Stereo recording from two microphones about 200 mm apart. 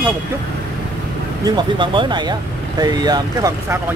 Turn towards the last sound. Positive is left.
turn(degrees=-15)  # may be behind; listen again after turning